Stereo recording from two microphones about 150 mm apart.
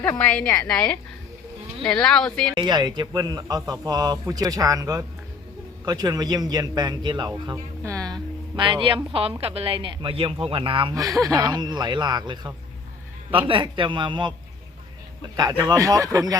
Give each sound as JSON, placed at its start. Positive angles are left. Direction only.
{"t": 0.0, "sound": "a woman's voice", "side_deg": 10}
{"t": 2.6, "sound": "a man's voice", "side_deg": -30}
{"t": 10.9, "sound": "a man's voice", "side_deg": -25}
{"t": 15.4, "sound": "a man's voice", "side_deg": -25}